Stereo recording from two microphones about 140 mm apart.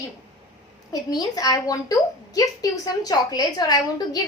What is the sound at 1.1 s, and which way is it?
A woman's voice, 25° left (ahead or behind).